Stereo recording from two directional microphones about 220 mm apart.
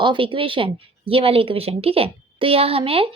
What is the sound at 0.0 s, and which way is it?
Speech, 20° right (ahead or behind).